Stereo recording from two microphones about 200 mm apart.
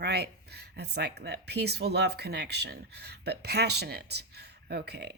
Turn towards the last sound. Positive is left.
turn(degrees=-55)  # may be behind; listen again after turning